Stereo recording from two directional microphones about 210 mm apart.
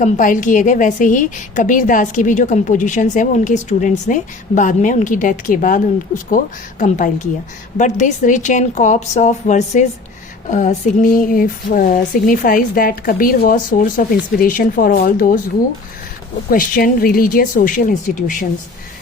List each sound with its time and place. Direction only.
0.0 s a woman's voice: 40° left (ahead or behind)
16.5 s a woman's voice: 40° left (ahead or behind)